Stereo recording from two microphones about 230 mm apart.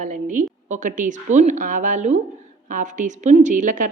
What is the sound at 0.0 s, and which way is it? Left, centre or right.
A woman's voice, right.